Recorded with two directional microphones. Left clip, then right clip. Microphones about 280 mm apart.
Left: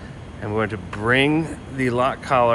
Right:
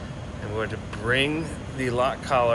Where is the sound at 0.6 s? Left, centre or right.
Left.